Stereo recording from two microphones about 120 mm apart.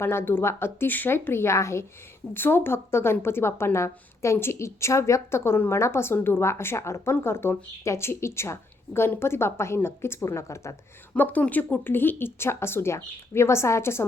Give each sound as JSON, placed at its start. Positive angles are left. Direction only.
{"t": 0.0, "sound": "a woman's voice", "side_deg": 20}
{"t": 11.1, "sound": "a woman's voice", "side_deg": 15}